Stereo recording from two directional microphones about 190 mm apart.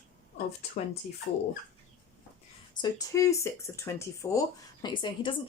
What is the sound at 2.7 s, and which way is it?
Speech, 20° left (ahead or behind).